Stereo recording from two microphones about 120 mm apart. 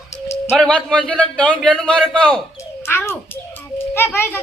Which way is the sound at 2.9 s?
20° left (ahead or behind).